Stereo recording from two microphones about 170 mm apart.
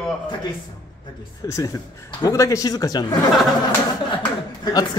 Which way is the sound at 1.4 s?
20° left (ahead or behind).